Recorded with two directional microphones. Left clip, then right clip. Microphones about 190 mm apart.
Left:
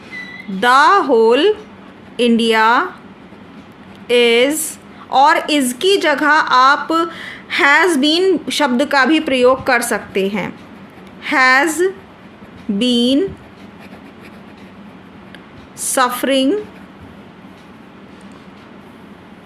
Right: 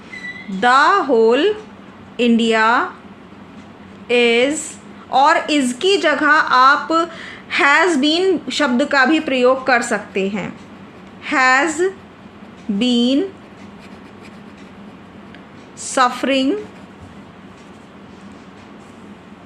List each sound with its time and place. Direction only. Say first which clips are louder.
0.6 s a woman's voice: left 2 dB; 25° left (ahead or behind)
4.1 s a woman's voice: left 2 dB; 25° left (ahead or behind)
15.8 s a woman's voice: even; 20° left (ahead or behind)